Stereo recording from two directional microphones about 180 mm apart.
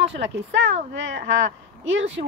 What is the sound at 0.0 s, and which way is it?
Speech, 85° right.